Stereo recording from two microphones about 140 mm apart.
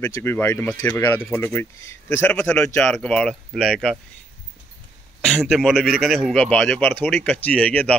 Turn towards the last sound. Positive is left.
turn(degrees=10)  # may be behind; listen again after turning